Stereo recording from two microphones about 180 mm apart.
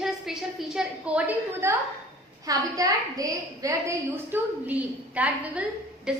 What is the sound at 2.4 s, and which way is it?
A woman's voice, 20° right (ahead or behind).